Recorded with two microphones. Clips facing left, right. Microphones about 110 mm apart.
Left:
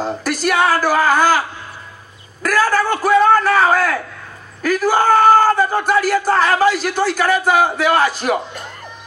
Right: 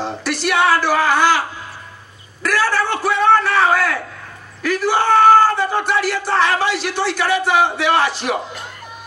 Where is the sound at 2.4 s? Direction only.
45° left (ahead or behind).